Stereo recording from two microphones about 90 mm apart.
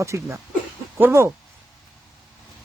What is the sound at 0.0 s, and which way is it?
Speech, 35° right (ahead or behind).